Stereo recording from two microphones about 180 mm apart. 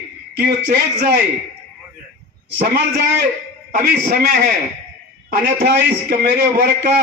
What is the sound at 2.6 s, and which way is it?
Speech, 65° right (ahead or behind).